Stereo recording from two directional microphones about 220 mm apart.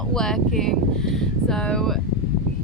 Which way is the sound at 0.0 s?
5° left (ahead or behind).